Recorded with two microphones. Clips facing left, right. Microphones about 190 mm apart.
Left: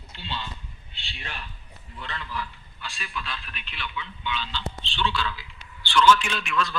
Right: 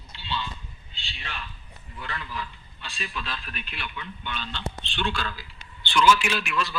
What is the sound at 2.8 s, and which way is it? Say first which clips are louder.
A man's voice: even; 35° right (ahead or behind).